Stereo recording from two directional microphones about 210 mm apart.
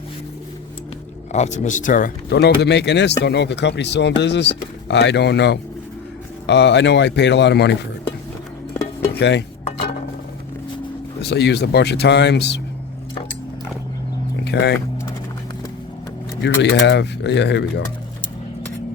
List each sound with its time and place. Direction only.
1.3 s speech: 35° left (ahead or behind); by 7.7 s 55° left (ahead or behind)
9.1 s cutlery: 55° left (ahead or behind)
11.2 s speech: 55° left (ahead or behind)
14.4 s speech: 50° left (ahead or behind)
16.4 s speech: 55° left (ahead or behind)